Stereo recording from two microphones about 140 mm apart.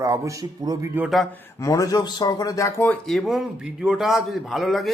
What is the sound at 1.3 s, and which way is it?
A man's voice, 20° left (ahead or behind).